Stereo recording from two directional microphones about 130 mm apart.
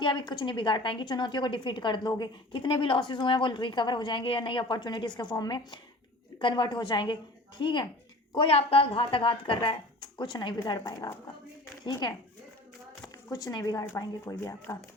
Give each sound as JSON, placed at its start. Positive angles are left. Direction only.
{"t": 0.0, "sound": "a woman's voice", "side_deg": 35}